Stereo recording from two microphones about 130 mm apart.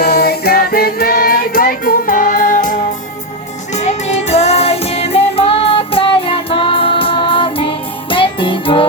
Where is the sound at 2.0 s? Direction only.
90° left.